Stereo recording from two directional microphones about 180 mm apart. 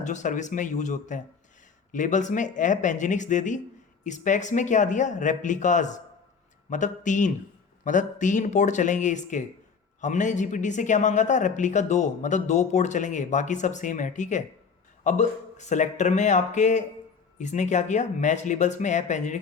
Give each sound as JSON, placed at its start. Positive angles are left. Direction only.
{"t": 0.0, "sound": "a man's voice", "side_deg": 45}